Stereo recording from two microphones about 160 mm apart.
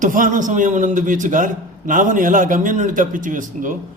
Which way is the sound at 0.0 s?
55° right (ahead or behind).